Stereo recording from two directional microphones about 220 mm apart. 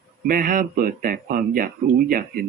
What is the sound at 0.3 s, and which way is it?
Speech, 40° right (ahead or behind).